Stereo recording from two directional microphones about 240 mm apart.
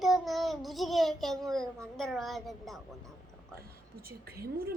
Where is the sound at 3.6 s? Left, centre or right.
Right.